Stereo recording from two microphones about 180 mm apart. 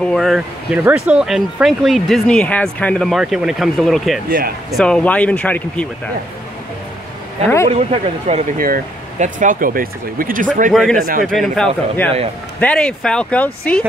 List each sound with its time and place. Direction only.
0.0 s speech: centre (ahead or behind)
7.7 s speech: 35° right (ahead or behind)
8.5 s speech: 50° right (ahead or behind)
10.7 s speech: centre (ahead or behind)